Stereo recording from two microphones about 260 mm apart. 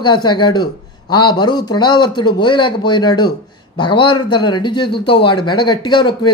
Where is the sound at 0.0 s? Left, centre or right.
Centre.